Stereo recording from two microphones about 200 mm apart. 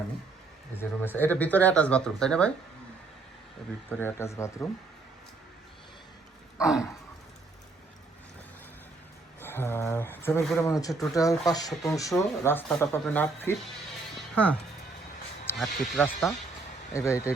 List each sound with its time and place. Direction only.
0.8 s speech: 10° left (ahead or behind)
3.8 s speech: 10° left (ahead or behind)
6.6 s speech: 5° right (ahead or behind)
9.4 s speech: 10° left (ahead or behind)
15.5 s speech: centre (ahead or behind)
16.9 s speech: 15° left (ahead or behind)